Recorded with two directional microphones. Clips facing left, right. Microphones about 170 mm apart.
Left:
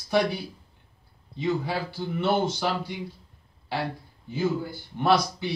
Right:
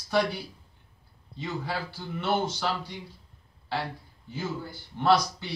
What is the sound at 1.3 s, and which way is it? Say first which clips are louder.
Speech: left 6 dB; 15° left (ahead or behind).